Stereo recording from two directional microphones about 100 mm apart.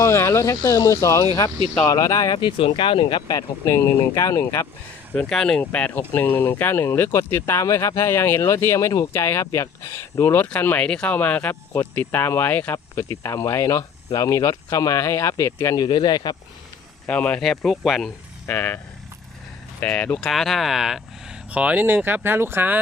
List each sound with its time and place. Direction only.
0.0 s speech: 25° left (ahead or behind)
0.5 s speech: 40° left (ahead or behind)
2.3 s speech: 60° left (ahead or behind)
3.3 s speech: 35° left (ahead or behind)
5.1 s speech: 10° left (ahead or behind); by 15.8 s 30° left (ahead or behind)
15.8 s speech: 45° left (ahead or behind)
17.1 s speech: 10° left (ahead or behind)
18.4 s speech: 20° left (ahead or behind)
19.8 s speech: 15° left (ahead or behind)
20.3 s speech: centre (ahead or behind); by 22.8 s 20° right (ahead or behind)